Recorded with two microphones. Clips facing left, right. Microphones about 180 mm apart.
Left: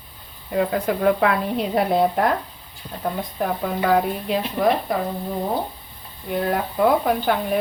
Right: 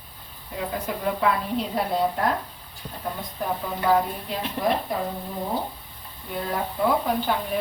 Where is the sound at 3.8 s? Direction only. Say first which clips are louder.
Left 2 dB; 70° left (ahead or behind).